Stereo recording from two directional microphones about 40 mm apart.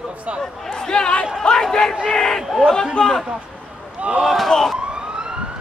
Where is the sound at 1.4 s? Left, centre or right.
Centre.